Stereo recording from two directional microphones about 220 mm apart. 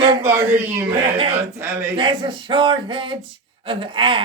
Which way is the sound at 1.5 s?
10° right (ahead or behind).